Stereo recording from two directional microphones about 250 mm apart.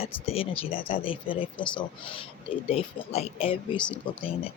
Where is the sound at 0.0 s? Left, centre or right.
Left.